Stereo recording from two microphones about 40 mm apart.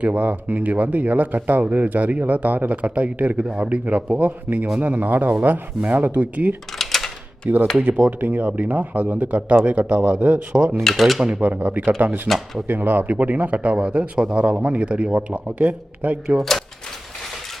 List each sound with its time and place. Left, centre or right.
0.0 s a man's voice: right
6.7 s typewriter: centre
7.5 s a man's voice: right
10.8 s speech: centre
11.2 s a man's voice: right
11.4 s a man's voice: right
14.5 s speech: right
14.8 s a man's voice: right
16.4 s speech: centre